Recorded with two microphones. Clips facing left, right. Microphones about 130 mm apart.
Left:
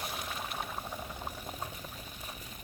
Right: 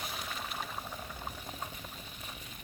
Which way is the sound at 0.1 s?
5° left (ahead or behind).